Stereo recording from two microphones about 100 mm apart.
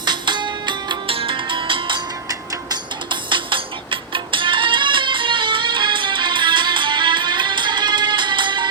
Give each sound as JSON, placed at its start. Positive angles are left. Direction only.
{"t": 0.0, "sound": "music", "side_deg": -50}
{"t": 1.1, "sound": "music", "side_deg": -65}